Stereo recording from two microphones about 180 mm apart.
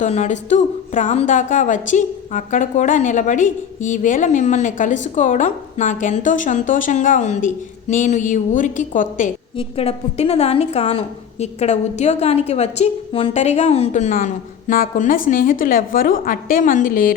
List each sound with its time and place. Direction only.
0.0 s speech: 40° left (ahead or behind)
9.6 s a woman's voice: 35° left (ahead or behind); by 17.2 s 50° left (ahead or behind)